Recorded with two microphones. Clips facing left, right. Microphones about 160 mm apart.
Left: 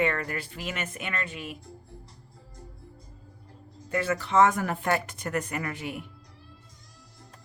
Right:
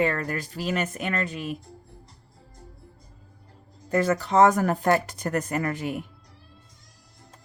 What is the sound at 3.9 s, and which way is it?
Speech, 40° right (ahead or behind).